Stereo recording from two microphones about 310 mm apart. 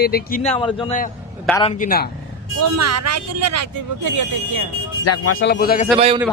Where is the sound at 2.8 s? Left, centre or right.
Right.